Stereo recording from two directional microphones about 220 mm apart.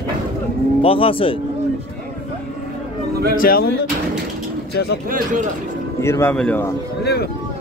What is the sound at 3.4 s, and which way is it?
Speech, 45° left (ahead or behind).